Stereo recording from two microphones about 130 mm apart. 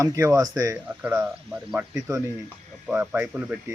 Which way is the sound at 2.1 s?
25° right (ahead or behind).